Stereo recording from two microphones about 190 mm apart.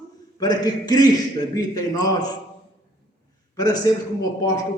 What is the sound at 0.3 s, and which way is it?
Speech, 20° left (ahead or behind).